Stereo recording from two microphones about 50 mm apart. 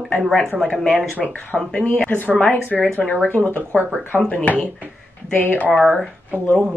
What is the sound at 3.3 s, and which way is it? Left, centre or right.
Speech, left.